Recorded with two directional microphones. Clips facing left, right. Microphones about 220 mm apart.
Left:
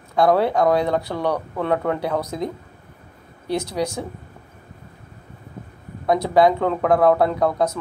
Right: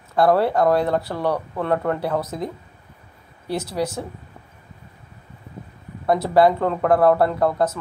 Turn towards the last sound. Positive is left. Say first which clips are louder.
# even
turn(degrees=-5)  # may be behind; listen again after turning